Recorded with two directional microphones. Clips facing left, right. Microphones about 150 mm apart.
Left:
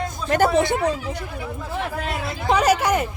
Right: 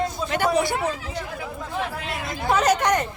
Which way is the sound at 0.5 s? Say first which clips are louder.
Left 3 dB; 20° left (ahead or behind).